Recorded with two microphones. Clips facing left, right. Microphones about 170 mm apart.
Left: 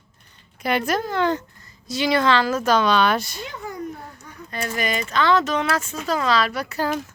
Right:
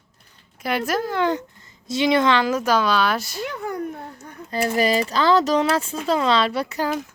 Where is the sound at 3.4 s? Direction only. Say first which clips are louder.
Right 5 dB; 60° right (ahead or behind).